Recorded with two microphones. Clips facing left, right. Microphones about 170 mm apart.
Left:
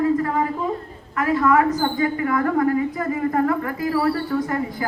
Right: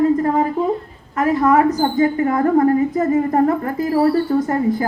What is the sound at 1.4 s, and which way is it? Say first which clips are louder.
Speech: right 3 dB; 35° right (ahead or behind).